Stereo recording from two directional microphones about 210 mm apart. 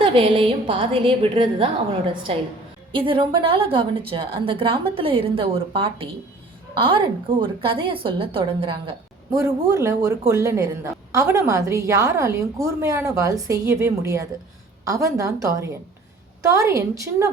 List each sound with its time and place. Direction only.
0.0 s a woman's voice: 25° right (ahead or behind)